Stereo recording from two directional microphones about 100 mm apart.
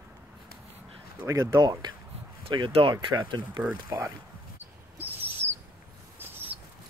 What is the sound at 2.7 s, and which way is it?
Speech, 60° right (ahead or behind).